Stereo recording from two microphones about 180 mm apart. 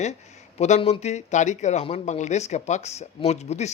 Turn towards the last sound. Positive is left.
turn(degrees=40)  # may be behind; listen again after turning